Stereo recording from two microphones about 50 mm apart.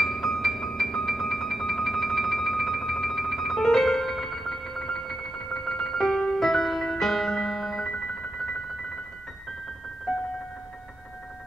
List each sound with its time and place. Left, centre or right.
0.0 s music: centre